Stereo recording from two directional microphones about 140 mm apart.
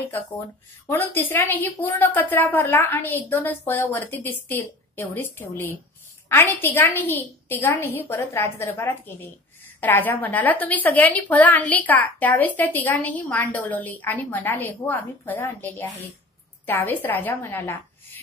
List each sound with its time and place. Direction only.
0.8 s a woman's voice: 15° left (ahead or behind)